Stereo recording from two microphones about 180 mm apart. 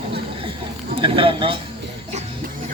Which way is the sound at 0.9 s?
30° right (ahead or behind).